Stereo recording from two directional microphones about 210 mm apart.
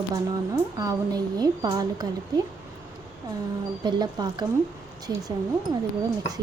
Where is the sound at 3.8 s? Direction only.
20° right (ahead or behind).